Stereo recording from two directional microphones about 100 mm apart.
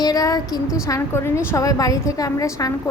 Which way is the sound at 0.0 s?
40° left (ahead or behind).